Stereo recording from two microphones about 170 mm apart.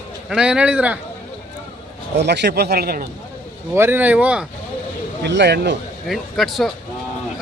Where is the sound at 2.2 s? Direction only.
85° right; by 3.1 s 60° right (ahead or behind).